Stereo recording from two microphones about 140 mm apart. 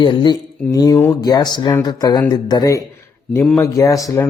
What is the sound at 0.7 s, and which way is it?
Speech, 25° left (ahead or behind).